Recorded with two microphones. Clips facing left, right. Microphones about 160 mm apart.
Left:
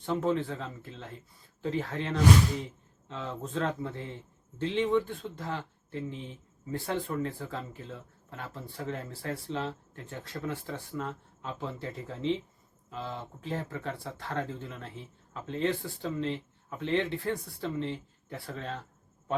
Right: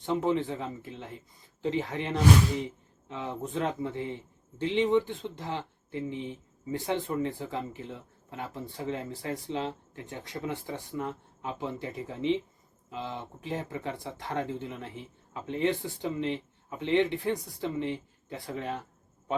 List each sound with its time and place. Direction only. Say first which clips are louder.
0.0 s a man's voice: right 1 dB; 20° right (ahead or behind)